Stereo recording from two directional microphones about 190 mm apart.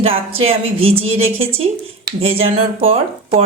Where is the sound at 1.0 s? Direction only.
90° right.